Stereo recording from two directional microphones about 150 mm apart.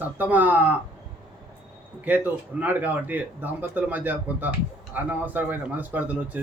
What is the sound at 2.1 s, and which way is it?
A man's voice, 10° right (ahead or behind).